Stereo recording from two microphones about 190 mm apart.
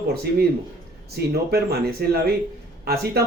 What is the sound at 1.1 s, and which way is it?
A man's voice, 55° right (ahead or behind).